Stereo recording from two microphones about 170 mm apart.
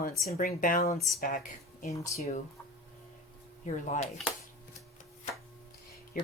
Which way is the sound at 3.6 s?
45° left (ahead or behind).